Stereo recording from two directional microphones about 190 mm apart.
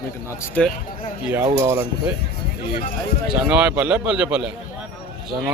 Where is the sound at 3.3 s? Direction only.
5° right (ahead or behind).